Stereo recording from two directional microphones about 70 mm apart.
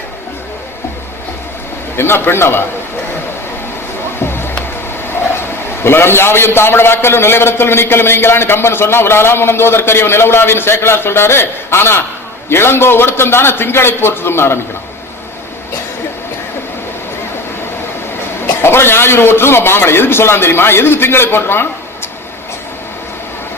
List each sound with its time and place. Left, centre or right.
2.0 s a man's voice: left
4.2 s music: left
5.3 s a man's voice: left
18.4 s a man's voice: left